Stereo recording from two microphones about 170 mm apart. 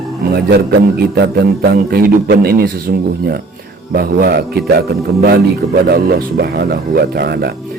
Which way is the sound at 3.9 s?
60° right (ahead or behind).